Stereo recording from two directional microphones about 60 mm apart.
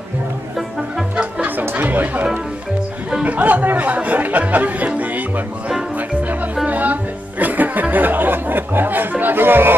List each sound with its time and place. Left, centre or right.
1.1 s music: right
3.3 s chatter: right
6.7 s music: right